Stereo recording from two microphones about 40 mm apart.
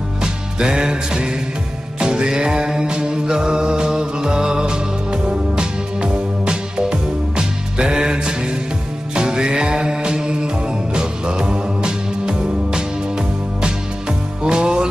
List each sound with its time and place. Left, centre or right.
0.2 s music: right
14.4 s music: right